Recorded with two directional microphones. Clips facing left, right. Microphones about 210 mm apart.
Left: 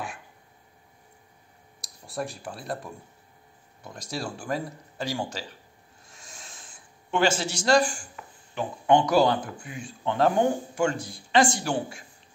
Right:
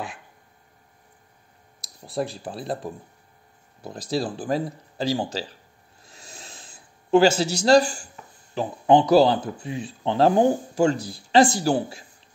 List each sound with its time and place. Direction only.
2.1 s speech: 30° right (ahead or behind)
6.0 s a sound: 35° right (ahead or behind)
8.5 s speech: 35° right (ahead or behind)